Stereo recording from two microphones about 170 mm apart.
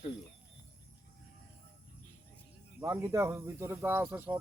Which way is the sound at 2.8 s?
20° right (ahead or behind).